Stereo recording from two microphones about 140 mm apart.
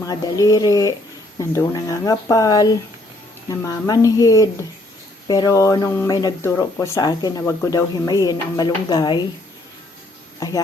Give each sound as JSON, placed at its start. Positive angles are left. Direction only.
{"t": 0.0, "sound": "speech", "side_deg": 25}
{"t": 6.4, "sound": "speech", "side_deg": 15}